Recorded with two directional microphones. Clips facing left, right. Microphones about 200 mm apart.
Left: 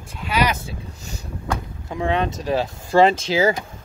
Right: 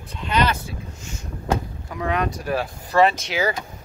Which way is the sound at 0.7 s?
35° left (ahead or behind).